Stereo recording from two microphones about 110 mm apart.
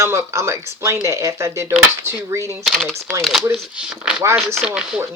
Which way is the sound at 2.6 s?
Centre (ahead or behind).